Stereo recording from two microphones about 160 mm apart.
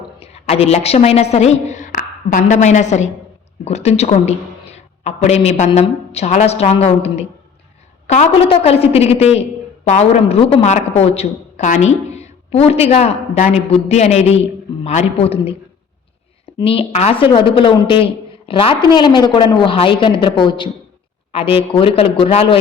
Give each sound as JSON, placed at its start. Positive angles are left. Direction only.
{"t": 0.2, "sound": "a woman's voice", "side_deg": 40}
{"t": 16.6, "sound": "a woman's voice", "side_deg": 35}